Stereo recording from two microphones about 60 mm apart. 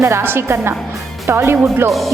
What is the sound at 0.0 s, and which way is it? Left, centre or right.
A woman's voice, right.